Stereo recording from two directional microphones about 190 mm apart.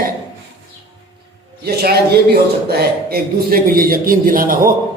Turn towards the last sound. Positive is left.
turn(degrees=-45)  # may be behind; listen again after turning